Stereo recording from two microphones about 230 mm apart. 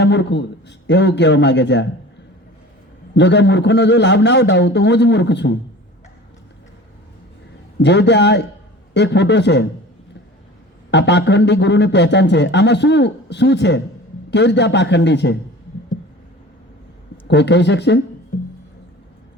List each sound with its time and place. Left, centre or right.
0.0 s a man's voice: left
3.2 s a man's voice: left
7.8 s a man's voice: left
10.9 s a man's voice: left
17.2 s a man's voice: left